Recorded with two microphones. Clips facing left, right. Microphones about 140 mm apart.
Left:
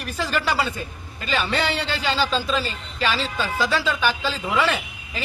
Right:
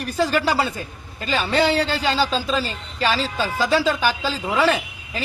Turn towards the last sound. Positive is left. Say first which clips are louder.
# right 4 dB
turn(degrees=-40)  # may be behind; listen again after turning